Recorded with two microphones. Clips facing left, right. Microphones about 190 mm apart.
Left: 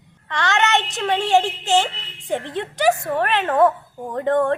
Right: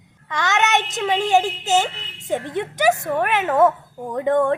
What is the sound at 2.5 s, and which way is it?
A woman's voice, 20° right (ahead or behind).